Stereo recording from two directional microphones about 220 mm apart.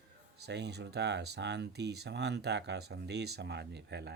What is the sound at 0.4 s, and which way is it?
Speech, 50° right (ahead or behind).